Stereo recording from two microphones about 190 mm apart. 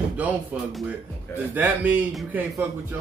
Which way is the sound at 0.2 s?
10° right (ahead or behind).